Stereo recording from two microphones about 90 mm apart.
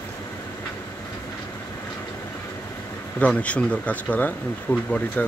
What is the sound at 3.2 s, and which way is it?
Speech, 15° left (ahead or behind).